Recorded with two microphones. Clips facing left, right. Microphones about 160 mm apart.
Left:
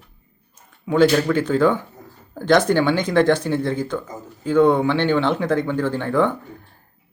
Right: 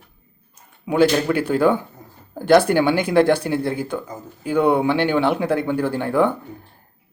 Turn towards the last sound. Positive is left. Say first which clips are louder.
# right 1 dB
turn(degrees=-10)  # may be behind; listen again after turning